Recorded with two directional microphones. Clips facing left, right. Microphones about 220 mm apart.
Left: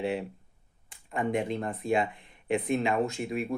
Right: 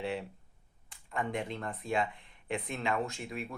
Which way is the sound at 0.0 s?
15° left (ahead or behind).